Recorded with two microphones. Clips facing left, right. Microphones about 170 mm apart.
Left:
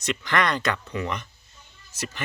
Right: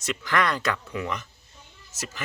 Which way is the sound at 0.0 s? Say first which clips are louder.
Left 1 dB; 5° right (ahead or behind).